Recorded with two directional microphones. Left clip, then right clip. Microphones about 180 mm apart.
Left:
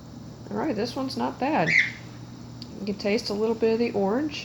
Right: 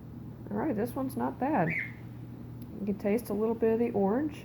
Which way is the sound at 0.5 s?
15° left (ahead or behind).